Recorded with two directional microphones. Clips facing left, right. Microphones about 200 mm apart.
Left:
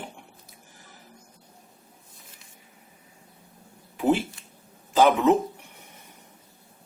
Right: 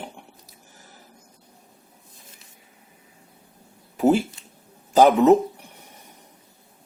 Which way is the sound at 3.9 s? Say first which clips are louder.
Right 4 dB; 40° right (ahead or behind).